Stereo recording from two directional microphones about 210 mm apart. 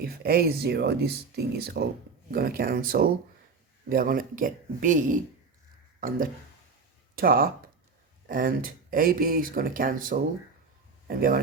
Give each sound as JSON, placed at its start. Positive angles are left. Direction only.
{"t": 0.0, "sound": "speech", "side_deg": -45}